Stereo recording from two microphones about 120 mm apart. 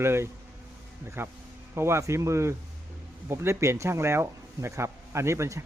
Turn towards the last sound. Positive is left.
turn(degrees=-25)  # may be behind; listen again after turning